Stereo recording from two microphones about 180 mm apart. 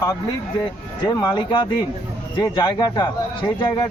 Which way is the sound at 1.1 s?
25° left (ahead or behind).